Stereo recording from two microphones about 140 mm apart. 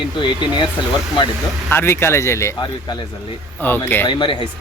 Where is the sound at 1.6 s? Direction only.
15° left (ahead or behind).